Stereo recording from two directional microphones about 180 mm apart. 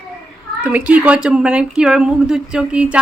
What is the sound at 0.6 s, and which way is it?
Speech, 5° right (ahead or behind).